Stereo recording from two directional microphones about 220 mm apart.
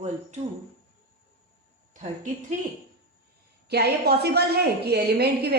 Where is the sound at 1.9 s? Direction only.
35° right (ahead or behind).